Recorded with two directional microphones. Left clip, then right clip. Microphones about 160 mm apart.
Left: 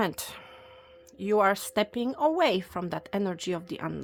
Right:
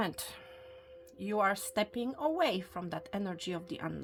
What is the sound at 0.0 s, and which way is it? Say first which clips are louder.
A woman's voice: left 6 dB; 45° left (ahead or behind).